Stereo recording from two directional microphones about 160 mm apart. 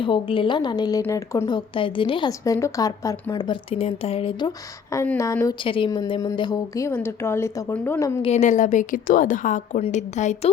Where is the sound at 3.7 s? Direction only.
40° left (ahead or behind).